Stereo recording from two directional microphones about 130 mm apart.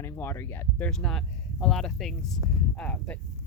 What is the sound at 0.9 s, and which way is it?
Speech, 5° left (ahead or behind).